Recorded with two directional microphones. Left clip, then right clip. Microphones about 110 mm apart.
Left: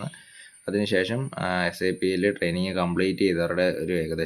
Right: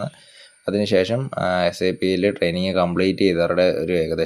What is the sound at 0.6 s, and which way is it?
Speech, 35° right (ahead or behind).